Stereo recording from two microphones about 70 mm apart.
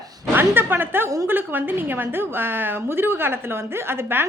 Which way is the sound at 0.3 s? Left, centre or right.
Right.